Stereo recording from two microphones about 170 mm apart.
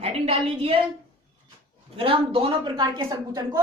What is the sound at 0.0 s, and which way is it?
Speech, 35° right (ahead or behind).